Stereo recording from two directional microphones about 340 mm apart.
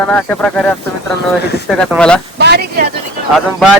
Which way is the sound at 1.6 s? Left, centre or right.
Centre.